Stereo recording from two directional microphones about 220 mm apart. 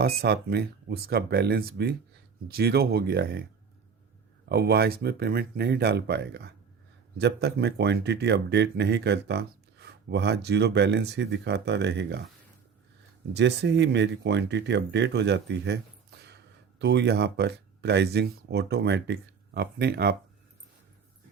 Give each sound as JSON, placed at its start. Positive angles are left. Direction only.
{"t": 0.0, "sound": "speech", "side_deg": -45}
{"t": 4.4, "sound": "speech", "side_deg": -45}
{"t": 13.3, "sound": "speech", "side_deg": -50}